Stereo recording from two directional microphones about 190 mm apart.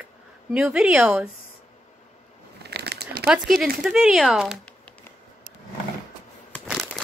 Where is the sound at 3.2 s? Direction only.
5° right (ahead or behind).